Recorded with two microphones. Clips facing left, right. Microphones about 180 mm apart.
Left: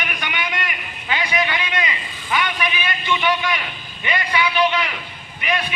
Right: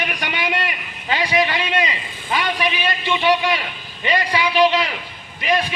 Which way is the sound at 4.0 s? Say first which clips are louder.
Right 2 dB; 35° right (ahead or behind).